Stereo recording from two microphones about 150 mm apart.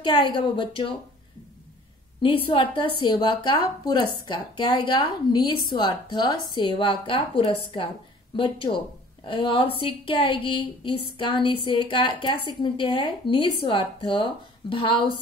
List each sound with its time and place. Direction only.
0.0 s a woman's voice: 35° left (ahead or behind)
2.2 s a woman's voice: 35° left (ahead or behind)